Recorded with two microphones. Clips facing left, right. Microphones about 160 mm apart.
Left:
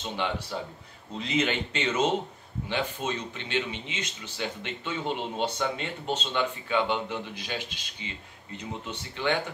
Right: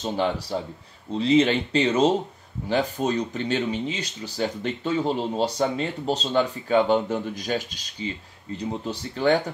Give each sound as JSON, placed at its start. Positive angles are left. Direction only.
{"t": 0.0, "sound": "speech", "side_deg": -40}